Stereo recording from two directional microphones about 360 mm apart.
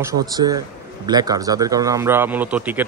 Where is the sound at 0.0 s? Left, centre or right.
Centre.